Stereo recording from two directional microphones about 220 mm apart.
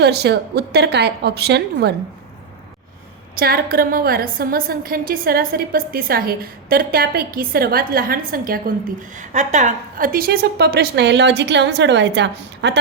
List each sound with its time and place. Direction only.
0.0 s a woman's voice: 50° right (ahead or behind)
3.3 s a woman's voice: 45° right (ahead or behind)